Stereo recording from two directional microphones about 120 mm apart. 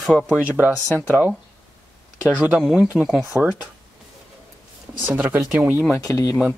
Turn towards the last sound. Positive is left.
turn(degrees=30)  # may be behind; listen again after turning